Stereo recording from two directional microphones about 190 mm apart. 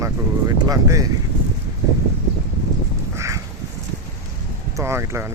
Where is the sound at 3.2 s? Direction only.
15° right (ahead or behind).